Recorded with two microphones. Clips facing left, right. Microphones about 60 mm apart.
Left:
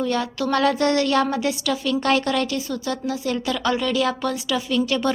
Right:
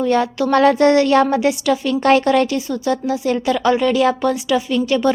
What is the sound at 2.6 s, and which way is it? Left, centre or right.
A woman's voice, centre.